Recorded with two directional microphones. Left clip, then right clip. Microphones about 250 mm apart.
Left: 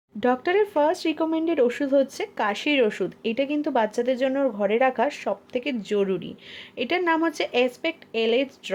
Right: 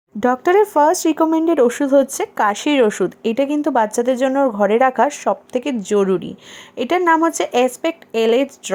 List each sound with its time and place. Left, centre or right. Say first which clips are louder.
0.2 s speech: right 7 dB; right